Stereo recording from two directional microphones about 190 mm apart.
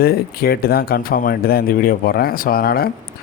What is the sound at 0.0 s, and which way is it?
Speech, 55° left (ahead or behind).